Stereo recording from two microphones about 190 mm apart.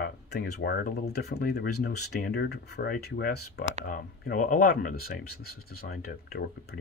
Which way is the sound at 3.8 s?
45° left (ahead or behind).